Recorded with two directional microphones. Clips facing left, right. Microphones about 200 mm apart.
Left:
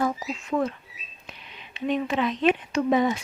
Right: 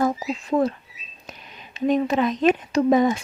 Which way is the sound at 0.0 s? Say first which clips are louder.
Right 4 dB; 35° right (ahead or behind).